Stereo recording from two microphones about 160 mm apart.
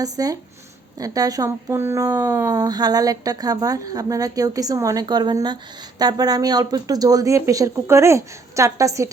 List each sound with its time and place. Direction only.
0.0 s speech: 25° right (ahead or behind)